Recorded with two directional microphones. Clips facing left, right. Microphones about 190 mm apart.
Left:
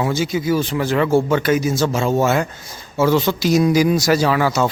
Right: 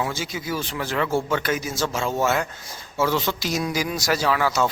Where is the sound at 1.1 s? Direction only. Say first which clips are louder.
Left 8 dB; 30° left (ahead or behind).